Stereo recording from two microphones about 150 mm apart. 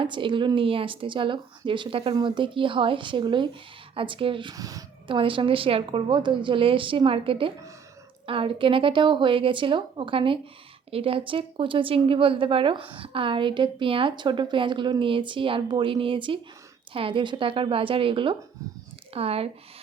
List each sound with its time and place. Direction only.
0.0 s a woman's voice: 35° right (ahead or behind)
5.1 s a woman's voice: 35° right (ahead or behind)
18.6 s speech: 20° right (ahead or behind)
19.1 s a woman's voice: 40° right (ahead or behind)